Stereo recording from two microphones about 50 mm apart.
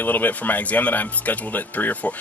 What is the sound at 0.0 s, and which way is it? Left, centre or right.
Speech, left.